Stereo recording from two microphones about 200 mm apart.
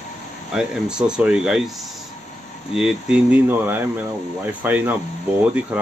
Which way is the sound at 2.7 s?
5° right (ahead or behind).